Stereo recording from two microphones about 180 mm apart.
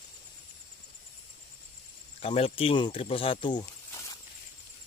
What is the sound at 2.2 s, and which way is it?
Speech, 30° left (ahead or behind).